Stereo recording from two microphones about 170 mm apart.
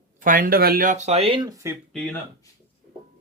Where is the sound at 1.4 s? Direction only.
20° right (ahead or behind).